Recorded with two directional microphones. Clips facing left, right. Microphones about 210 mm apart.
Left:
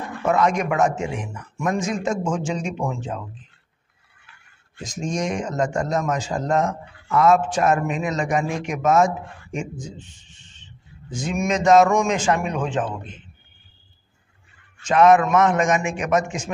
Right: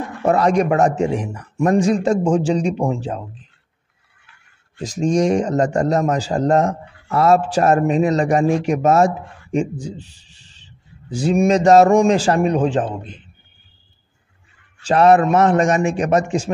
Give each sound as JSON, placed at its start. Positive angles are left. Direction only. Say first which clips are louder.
{"t": 0.2, "sound": "a man's voice", "louder": "right 5 dB", "side_deg": -35}
{"t": 4.8, "sound": "a man's voice", "louder": "right 9 dB", "side_deg": -35}
{"t": 14.8, "sound": "a man's voice", "louder": "right 2 dB", "side_deg": -35}